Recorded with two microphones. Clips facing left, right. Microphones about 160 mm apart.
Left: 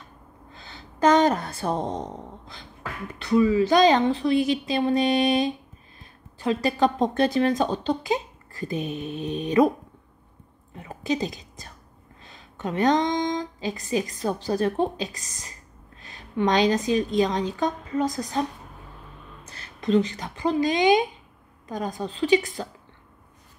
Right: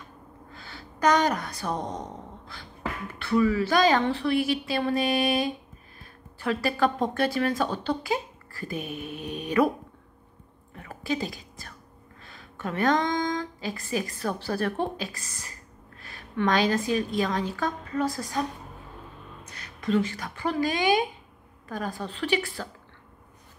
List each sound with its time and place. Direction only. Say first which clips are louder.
0.5 s a woman's voice: even; 20° left (ahead or behind)
10.7 s a woman's voice: left 3 dB; 20° left (ahead or behind)
19.4 s a woman's voice: left 3 dB; 30° left (ahead or behind)